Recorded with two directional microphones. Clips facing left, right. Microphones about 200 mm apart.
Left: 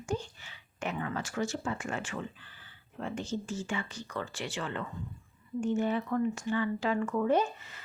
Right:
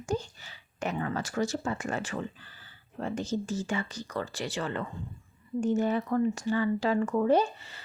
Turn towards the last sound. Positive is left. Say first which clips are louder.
# right 3 dB
turn(degrees=-30)  # may be behind; listen again after turning